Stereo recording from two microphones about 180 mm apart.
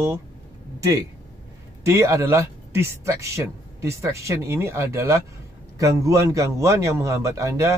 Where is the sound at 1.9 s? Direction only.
15° right (ahead or behind).